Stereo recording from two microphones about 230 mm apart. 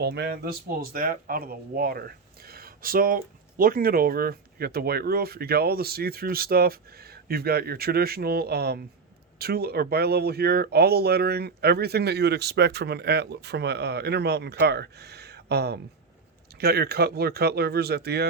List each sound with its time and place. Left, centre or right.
0.0 s speech: right